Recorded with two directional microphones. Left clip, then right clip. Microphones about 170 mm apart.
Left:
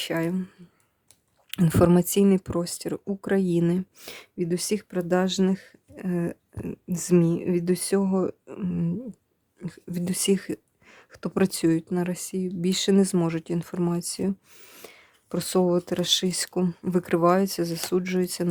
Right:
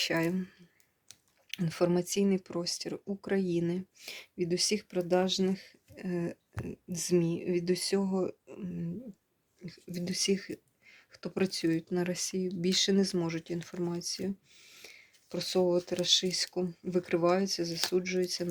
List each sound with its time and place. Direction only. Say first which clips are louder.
0.0 s speech: left 3 dB; 20° left (ahead or behind)
1.5 s speech: left 9 dB; 55° left (ahead or behind)
11.7 s speech: left 6 dB; 30° left (ahead or behind)